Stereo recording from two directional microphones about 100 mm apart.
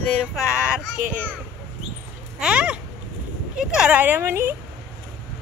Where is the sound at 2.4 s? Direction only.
10° right (ahead or behind).